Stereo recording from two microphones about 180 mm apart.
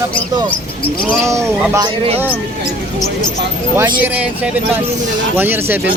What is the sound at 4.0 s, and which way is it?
Speech, 10° right (ahead or behind).